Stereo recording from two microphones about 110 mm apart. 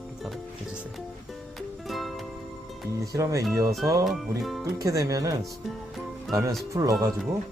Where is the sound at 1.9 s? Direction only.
Centre (ahead or behind).